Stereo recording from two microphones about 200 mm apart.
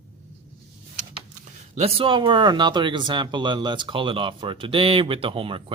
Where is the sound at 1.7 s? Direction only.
30° right (ahead or behind).